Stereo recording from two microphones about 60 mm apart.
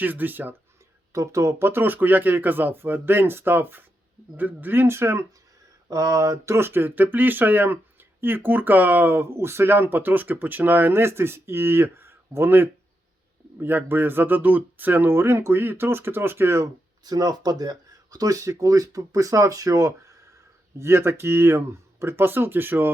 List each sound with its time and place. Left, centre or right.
0.0 s speech: right
1.1 s speech: right
5.9 s speech: right
16.6 s speech: right
20.7 s speech: right